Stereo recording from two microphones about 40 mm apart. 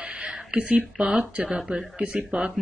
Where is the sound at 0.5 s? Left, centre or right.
Right.